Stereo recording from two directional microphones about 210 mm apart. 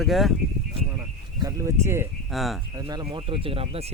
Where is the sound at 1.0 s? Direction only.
15° right (ahead or behind).